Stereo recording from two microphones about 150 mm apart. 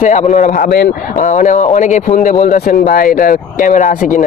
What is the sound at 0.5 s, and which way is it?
Speech, 90° left.